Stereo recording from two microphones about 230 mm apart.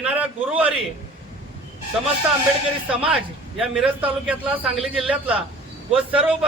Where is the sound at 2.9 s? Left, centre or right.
Right.